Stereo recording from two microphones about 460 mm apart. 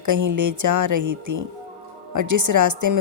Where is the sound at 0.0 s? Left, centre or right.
Right.